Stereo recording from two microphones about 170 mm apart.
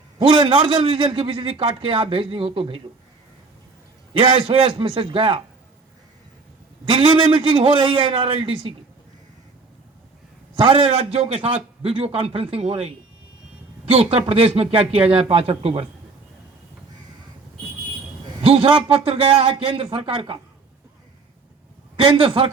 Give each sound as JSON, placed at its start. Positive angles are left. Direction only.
{"t": 0.2, "sound": "a man's voice", "side_deg": -30}
{"t": 4.1, "sound": "a man's voice", "side_deg": -35}
{"t": 6.8, "sound": "a man's voice", "side_deg": -30}
{"t": 10.5, "sound": "a man's voice", "side_deg": -35}
{"t": 13.9, "sound": "a man's voice", "side_deg": -35}
{"t": 18.4, "sound": "a man's voice", "side_deg": -35}
{"t": 21.9, "sound": "a man's voice", "side_deg": -30}